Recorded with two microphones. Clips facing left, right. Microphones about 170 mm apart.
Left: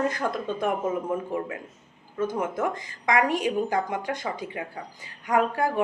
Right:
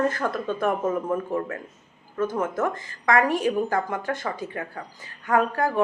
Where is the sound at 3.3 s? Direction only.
15° left (ahead or behind).